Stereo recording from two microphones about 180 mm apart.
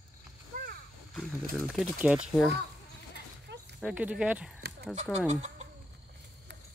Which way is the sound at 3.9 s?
5° right (ahead or behind).